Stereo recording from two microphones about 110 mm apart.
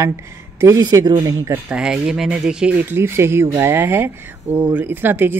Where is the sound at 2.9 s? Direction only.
20° right (ahead or behind).